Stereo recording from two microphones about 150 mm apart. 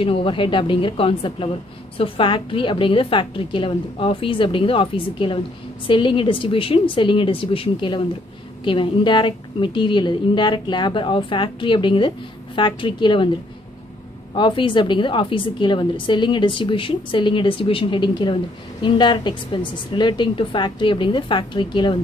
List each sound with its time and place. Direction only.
0.0 s a woman's voice: 40° left (ahead or behind)
14.3 s a woman's voice: 35° left (ahead or behind)